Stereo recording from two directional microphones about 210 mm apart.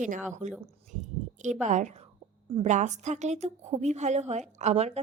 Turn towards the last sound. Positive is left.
turn(degrees=-30)  # may be behind; listen again after turning